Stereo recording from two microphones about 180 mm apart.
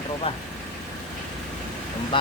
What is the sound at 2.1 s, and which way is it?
Speech, 30° left (ahead or behind).